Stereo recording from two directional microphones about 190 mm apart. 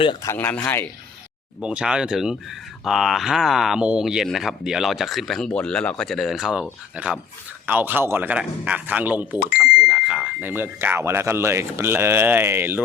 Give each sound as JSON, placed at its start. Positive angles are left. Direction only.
{"t": 0.0, "sound": "speech", "side_deg": 20}
{"t": 1.6, "sound": "speech", "side_deg": -5}